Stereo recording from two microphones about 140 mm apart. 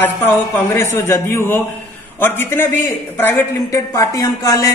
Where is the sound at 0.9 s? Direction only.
20° left (ahead or behind).